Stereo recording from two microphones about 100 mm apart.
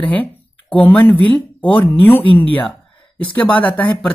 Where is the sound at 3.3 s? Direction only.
15° left (ahead or behind).